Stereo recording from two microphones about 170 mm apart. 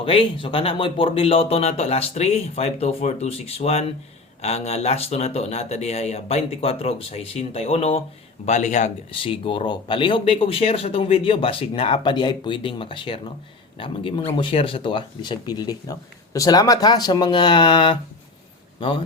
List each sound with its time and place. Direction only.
0.0 s speech: 30° left (ahead or behind)